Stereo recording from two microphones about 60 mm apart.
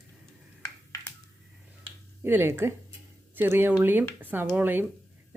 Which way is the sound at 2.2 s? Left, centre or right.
Right.